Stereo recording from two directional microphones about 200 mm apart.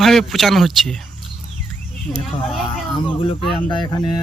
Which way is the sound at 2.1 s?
30° left (ahead or behind).